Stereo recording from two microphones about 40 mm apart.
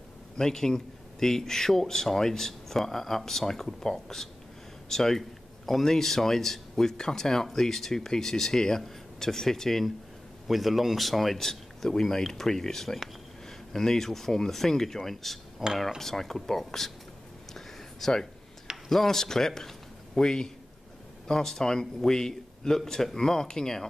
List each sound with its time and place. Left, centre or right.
0.4 s speech: centre
15.6 s cutlery: centre
16.0 s speech: centre
17.6 s a sound: centre
18.9 s speech: centre